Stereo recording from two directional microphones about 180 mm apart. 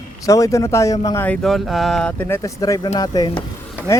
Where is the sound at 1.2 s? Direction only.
5° left (ahead or behind); by 3.4 s 20° left (ahead or behind).